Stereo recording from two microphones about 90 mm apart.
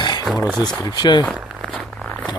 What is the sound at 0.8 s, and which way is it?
Speech, 55° left (ahead or behind).